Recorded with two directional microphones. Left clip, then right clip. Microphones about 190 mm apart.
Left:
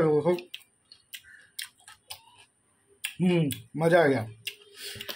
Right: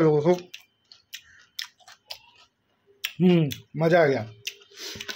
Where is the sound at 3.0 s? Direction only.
25° right (ahead or behind).